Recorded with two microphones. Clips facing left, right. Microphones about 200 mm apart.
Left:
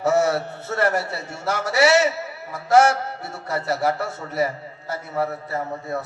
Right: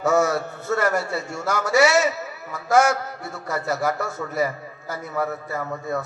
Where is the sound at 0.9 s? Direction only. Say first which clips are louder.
Even; 30° left (ahead or behind).